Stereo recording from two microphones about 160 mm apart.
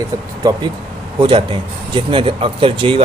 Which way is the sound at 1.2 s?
30° right (ahead or behind).